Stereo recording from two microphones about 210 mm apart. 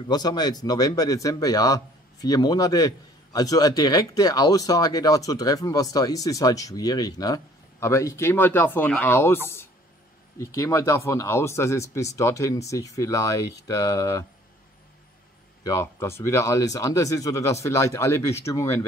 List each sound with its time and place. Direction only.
0.1 s speech: 20° left (ahead or behind)
15.6 s speech: 15° left (ahead or behind)